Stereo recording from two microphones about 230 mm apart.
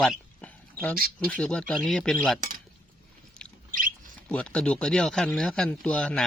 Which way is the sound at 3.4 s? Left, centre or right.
Centre.